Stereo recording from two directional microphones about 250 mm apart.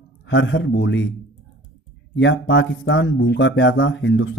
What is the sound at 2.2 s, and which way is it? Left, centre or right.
Speech, left.